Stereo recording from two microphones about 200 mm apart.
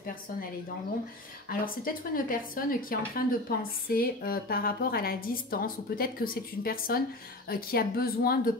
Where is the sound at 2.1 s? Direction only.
45° left (ahead or behind).